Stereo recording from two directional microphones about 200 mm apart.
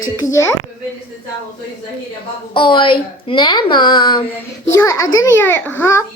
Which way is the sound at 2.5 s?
25° left (ahead or behind).